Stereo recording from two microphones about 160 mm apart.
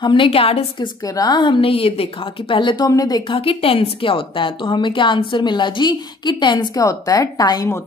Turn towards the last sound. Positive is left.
turn(degrees=20)  # may be behind; listen again after turning